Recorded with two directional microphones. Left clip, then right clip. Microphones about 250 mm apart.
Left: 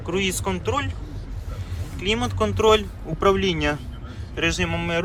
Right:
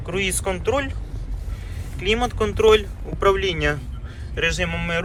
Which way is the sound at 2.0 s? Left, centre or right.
Centre.